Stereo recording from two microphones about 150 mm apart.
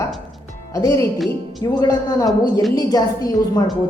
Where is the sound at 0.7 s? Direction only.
20° left (ahead or behind).